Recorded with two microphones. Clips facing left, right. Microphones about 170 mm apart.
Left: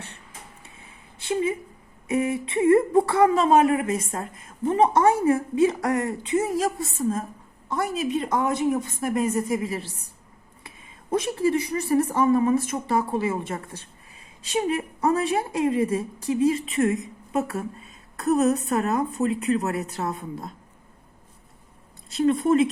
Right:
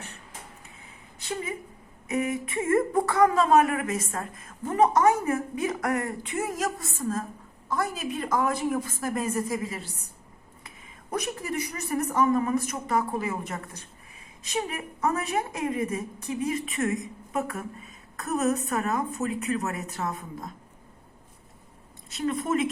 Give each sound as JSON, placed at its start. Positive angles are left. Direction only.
{"t": 2.0, "sound": "a woman's voice", "side_deg": 30}
{"t": 11.1, "sound": "a woman's voice", "side_deg": 30}
{"t": 22.1, "sound": "a woman's voice", "side_deg": 35}